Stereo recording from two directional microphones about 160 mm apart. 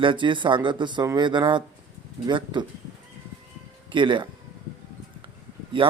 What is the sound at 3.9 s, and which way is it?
Speech, 30° right (ahead or behind).